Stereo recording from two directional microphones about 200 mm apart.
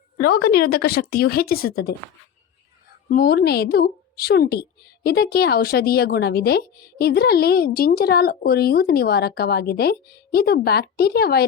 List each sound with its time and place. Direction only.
0.2 s a woman's voice: 50° left (ahead or behind)
3.1 s a woman's voice: 50° left (ahead or behind)